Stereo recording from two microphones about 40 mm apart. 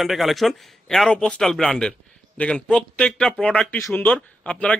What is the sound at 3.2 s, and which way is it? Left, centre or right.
Speech, centre.